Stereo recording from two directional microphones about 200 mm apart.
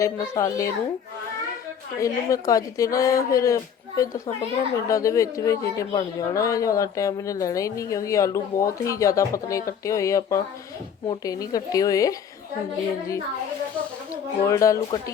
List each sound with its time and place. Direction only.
0.0 s a woman's voice: 15° left (ahead or behind)
2.0 s a woman's voice: 15° left (ahead or behind)
14.4 s a woman's voice: 15° left (ahead or behind)